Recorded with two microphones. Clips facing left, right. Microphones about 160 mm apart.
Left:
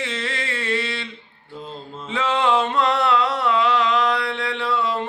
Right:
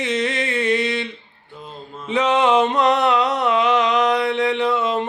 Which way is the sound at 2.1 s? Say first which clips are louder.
Right 4 dB; 20° right (ahead or behind).